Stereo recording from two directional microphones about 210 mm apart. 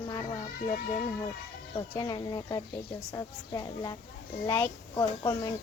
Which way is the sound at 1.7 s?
20° left (ahead or behind).